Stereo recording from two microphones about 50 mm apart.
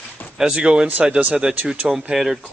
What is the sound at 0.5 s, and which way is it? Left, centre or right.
Speech, right.